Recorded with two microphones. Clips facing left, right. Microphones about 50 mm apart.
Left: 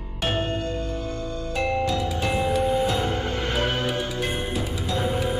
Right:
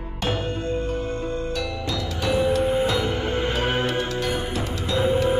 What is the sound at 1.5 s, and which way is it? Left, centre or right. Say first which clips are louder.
Music: left 4 dB; left.